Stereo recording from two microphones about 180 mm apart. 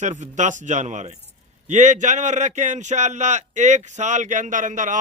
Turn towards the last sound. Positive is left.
turn(degrees=-45)  # may be behind; listen again after turning